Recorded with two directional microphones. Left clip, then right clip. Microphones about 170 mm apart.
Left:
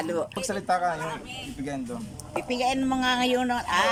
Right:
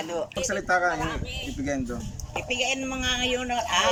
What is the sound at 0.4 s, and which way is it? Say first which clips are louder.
Speech: right 3 dB; 20° left (ahead or behind).